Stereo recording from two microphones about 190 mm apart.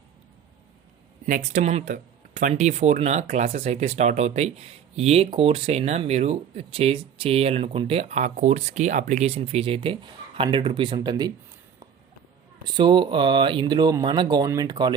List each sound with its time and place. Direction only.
1.3 s speech: 40° right (ahead or behind); by 11.3 s 20° right (ahead or behind)
12.7 s speech: 25° right (ahead or behind)